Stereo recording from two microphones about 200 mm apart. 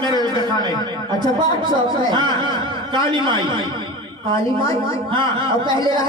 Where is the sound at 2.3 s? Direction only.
20° right (ahead or behind).